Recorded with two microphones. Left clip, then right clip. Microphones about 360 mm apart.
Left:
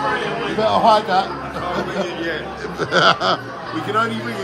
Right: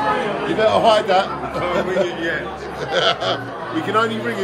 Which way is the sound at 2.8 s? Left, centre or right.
Centre.